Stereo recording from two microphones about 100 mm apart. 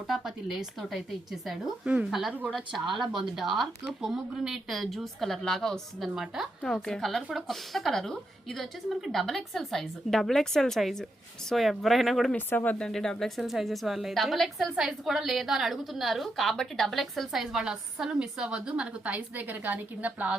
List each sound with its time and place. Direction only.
0.1 s a woman's voice: 5° right (ahead or behind)
12.5 s speech: 15° left (ahead or behind)
12.9 s a woman's voice: 5° left (ahead or behind); by 20.3 s 15° right (ahead or behind)